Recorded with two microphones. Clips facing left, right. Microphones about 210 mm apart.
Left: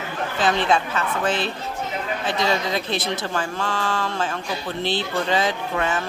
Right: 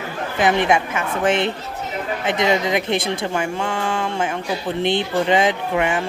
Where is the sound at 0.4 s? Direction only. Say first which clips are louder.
Right 3 dB; 15° right (ahead or behind).